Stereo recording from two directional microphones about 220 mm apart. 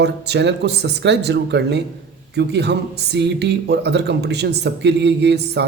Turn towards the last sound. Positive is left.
turn(degrees=-50)  # may be behind; listen again after turning